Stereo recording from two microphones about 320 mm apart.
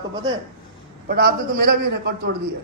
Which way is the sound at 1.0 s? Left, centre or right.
Right.